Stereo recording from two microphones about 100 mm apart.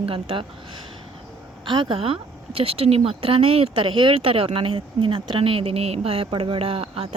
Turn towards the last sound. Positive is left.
turn(degrees=-75)  # may be behind; listen again after turning